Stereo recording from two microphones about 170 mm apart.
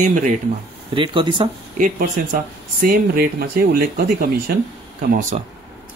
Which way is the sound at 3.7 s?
60° right (ahead or behind).